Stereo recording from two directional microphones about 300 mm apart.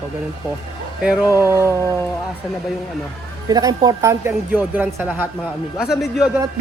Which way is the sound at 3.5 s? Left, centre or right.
Centre.